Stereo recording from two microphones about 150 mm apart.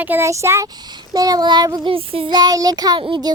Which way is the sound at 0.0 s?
15° right (ahead or behind).